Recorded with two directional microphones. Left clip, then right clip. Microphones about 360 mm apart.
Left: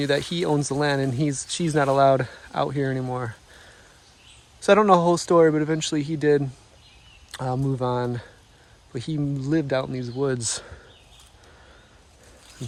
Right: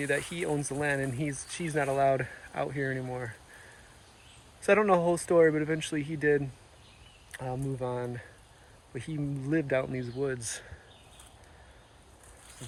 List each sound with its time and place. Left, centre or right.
0.3 s speech: centre
4.6 s speech: centre